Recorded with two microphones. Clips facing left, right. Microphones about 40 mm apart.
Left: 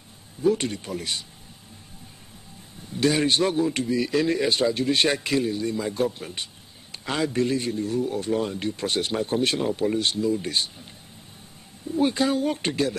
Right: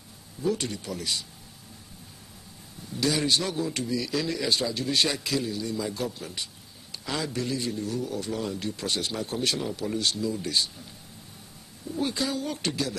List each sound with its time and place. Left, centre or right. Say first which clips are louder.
0.4 s a man's voice: left 6 dB; left
2.9 s a man's voice: left 4 dB; left
12.0 s speech: left 7 dB; left